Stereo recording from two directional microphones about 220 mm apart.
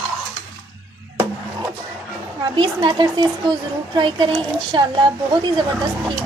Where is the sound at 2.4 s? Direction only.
20° right (ahead or behind).